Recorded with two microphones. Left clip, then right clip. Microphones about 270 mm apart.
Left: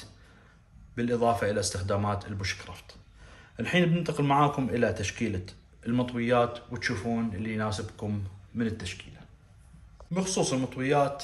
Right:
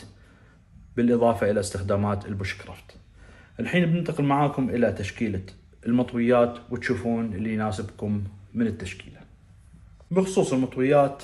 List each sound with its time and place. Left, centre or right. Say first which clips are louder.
0.9 s speech: right 5 dB; centre